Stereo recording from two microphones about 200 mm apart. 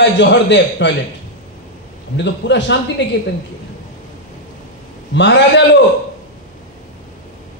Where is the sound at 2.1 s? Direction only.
60° left (ahead or behind).